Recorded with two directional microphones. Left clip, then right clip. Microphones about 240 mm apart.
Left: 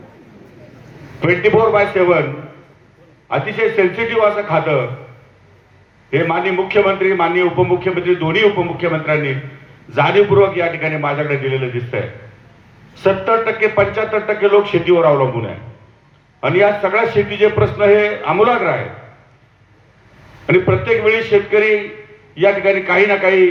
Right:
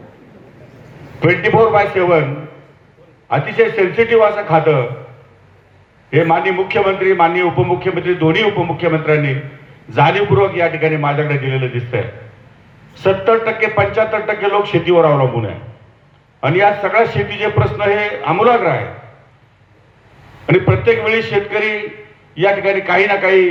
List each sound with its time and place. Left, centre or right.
1.2 s a man's voice: right
3.2 s a man's voice: right
6.1 s a man's voice: right
20.5 s a man's voice: right